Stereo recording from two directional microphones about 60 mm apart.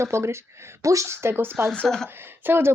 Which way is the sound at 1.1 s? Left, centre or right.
Right.